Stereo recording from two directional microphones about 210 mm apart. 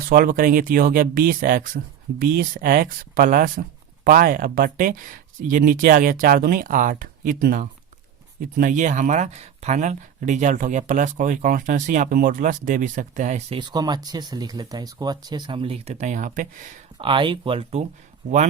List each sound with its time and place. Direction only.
0.1 s speech: 40° right (ahead or behind)
13.6 s speech: 20° right (ahead or behind); by 16.7 s 40° right (ahead or behind)
17.0 s speech: 25° right (ahead or behind)